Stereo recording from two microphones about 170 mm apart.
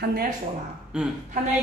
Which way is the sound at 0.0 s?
65° right (ahead or behind).